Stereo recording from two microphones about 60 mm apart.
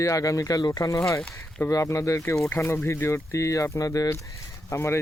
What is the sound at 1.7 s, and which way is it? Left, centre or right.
Speech, left.